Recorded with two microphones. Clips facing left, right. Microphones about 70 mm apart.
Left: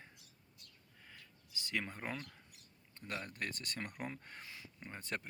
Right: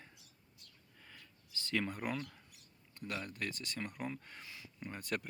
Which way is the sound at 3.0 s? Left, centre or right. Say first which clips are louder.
Right 2 dB; left.